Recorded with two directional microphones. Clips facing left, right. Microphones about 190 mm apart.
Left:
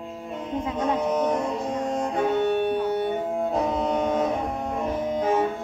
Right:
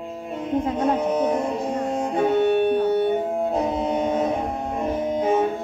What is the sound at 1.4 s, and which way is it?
Music, 30° right (ahead or behind).